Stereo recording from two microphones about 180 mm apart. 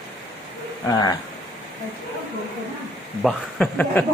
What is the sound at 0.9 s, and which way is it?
Speech, 20° left (ahead or behind).